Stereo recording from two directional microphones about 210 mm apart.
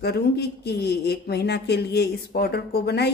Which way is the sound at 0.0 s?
50° left (ahead or behind).